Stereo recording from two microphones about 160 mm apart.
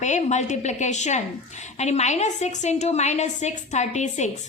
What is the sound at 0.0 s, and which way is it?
A woman's voice, 45° left (ahead or behind).